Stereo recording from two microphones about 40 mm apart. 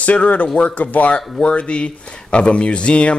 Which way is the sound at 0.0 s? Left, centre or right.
Left.